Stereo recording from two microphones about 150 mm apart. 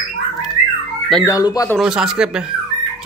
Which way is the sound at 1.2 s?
25° left (ahead or behind).